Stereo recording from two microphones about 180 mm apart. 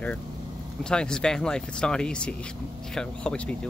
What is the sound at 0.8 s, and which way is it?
Speech, 5° left (ahead or behind).